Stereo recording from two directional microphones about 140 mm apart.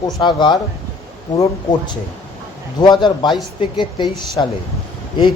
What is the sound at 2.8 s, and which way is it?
Speech, 30° left (ahead or behind).